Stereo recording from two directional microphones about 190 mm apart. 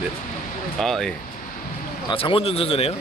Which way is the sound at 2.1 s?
30° left (ahead or behind).